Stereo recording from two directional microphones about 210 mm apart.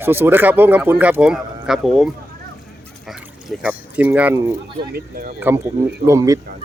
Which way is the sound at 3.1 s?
5° right (ahead or behind).